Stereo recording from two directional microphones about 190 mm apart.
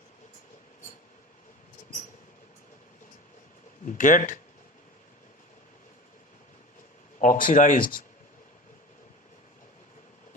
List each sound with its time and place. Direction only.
3.8 s speech: 45° left (ahead or behind)
7.2 s speech: 45° left (ahead or behind)